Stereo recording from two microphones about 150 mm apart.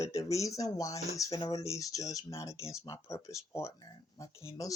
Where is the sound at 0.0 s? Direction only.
20° left (ahead or behind).